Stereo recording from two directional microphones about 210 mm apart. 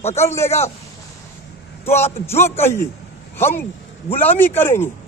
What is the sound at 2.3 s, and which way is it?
Speech, 30° left (ahead or behind).